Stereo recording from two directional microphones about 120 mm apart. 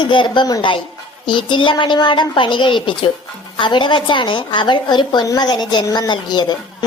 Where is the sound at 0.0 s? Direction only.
40° left (ahead or behind).